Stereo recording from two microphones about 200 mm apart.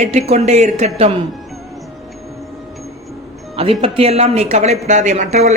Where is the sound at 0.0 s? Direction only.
35° right (ahead or behind).